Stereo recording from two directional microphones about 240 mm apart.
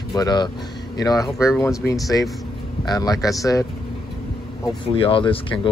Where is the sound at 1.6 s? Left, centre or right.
Centre.